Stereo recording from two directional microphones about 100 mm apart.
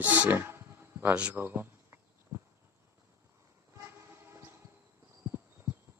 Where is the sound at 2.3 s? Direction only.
35° right (ahead or behind).